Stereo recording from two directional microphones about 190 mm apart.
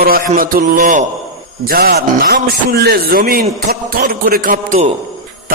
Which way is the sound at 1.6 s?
55° right (ahead or behind).